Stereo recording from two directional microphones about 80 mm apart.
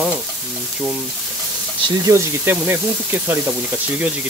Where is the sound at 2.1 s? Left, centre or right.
Right.